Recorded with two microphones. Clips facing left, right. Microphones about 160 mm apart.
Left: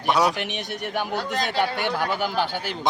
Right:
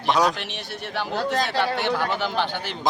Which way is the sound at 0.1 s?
Centre (ahead or behind).